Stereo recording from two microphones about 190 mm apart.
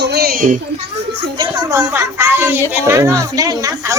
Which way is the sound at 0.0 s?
55° right (ahead or behind).